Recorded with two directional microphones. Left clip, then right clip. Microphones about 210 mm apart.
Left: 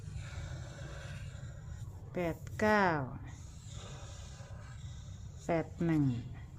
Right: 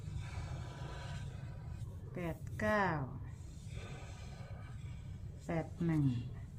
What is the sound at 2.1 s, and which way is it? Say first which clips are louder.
Speech: left 7 dB; 55° left (ahead or behind).